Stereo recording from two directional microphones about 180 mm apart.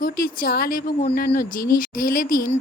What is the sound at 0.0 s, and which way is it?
Speech, 55° left (ahead or behind).